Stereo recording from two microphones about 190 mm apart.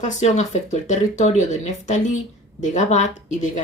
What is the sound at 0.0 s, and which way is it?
Speech, 35° left (ahead or behind).